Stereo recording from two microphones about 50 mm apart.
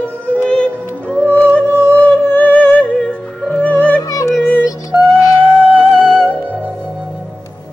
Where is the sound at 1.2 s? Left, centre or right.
Left.